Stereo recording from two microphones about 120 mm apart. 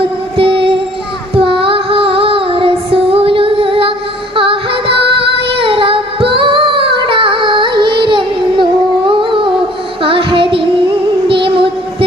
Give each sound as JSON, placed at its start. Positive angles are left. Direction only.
{"t": 0.3, "sound": "music", "side_deg": -45}
{"t": 5.5, "sound": "child singing", "side_deg": -50}
{"t": 9.0, "sound": "humming", "side_deg": -45}
{"t": 10.0, "sound": "music", "side_deg": -45}
{"t": 11.3, "sound": "child singing", "side_deg": -45}